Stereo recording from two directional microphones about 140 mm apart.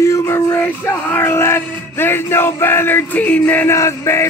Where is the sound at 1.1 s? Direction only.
20° left (ahead or behind).